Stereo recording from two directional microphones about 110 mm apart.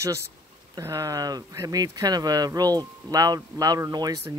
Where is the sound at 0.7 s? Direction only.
30° right (ahead or behind).